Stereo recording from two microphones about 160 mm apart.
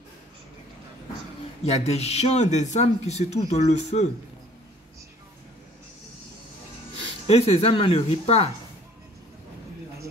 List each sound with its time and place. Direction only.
1.6 s speech: 40° left (ahead or behind)
7.2 s speech: 40° left (ahead or behind)